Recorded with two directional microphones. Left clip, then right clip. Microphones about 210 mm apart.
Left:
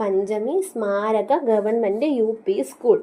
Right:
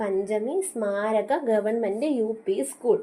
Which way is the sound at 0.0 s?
25° left (ahead or behind).